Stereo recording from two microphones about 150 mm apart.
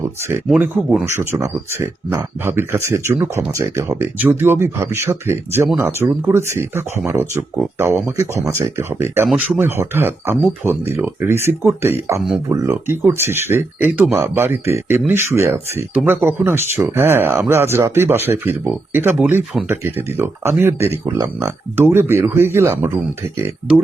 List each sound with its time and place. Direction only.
0.5 s speech: 5° right (ahead or behind)
1.2 s speech: 20° right (ahead or behind)